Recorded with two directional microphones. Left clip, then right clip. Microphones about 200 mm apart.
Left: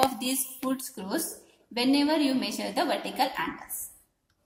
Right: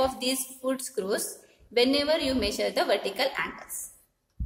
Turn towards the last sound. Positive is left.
turn(degrees=-35)  # may be behind; listen again after turning